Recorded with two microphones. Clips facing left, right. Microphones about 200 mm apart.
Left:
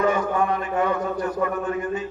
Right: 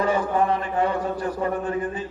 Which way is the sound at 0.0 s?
30° right (ahead or behind).